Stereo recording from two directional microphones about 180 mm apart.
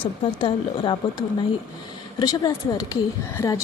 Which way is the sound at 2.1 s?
20° left (ahead or behind).